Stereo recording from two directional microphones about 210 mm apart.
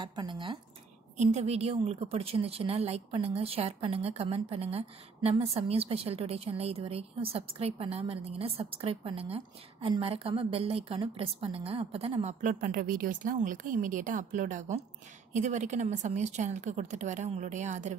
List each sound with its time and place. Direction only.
0.0 s a woman's voice: 20° right (ahead or behind)
1.1 s a woman's voice: 35° right (ahead or behind)